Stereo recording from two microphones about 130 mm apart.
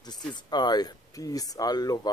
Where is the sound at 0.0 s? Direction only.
35° left (ahead or behind).